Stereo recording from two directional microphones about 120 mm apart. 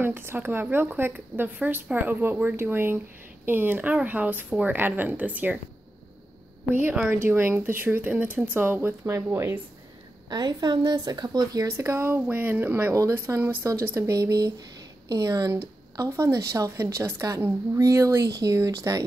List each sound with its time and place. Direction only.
0.0 s speech: 20° right (ahead or behind)
6.7 s a woman's voice: 15° right (ahead or behind)
10.3 s a woman's voice: 35° right (ahead or behind)